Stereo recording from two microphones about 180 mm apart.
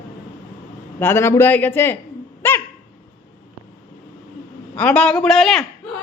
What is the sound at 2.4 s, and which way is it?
Dog, 15° left (ahead or behind).